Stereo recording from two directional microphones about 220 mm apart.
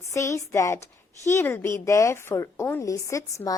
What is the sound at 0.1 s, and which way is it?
A woman's voice, 15° left (ahead or behind).